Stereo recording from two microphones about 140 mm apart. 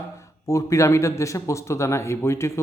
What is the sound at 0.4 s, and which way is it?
A man's voice, 20° left (ahead or behind).